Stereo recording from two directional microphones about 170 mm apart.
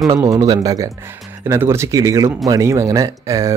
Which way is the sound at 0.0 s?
20° right (ahead or behind).